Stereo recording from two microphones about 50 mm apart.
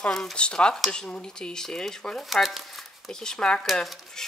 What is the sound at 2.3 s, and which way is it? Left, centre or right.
Speech, centre.